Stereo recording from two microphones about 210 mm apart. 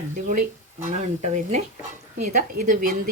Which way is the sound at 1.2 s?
35° right (ahead or behind).